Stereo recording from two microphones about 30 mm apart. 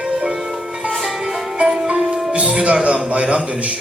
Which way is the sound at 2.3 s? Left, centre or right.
Right.